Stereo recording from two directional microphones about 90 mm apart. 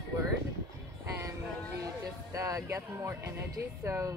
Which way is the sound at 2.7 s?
30° right (ahead or behind).